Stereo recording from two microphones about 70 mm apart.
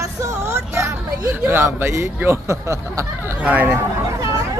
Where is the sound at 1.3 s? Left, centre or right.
Right.